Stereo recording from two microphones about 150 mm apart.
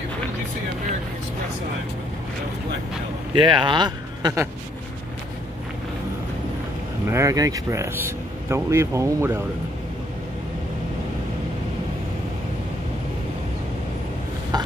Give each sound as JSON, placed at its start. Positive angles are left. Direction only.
{"t": 3.3, "sound": "speech", "side_deg": -35}
{"t": 7.1, "sound": "speech", "side_deg": -20}
{"t": 14.5, "sound": "a sound", "side_deg": -25}